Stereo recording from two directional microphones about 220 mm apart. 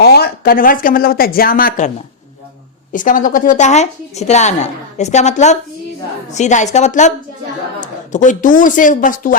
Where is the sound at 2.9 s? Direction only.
35° left (ahead or behind).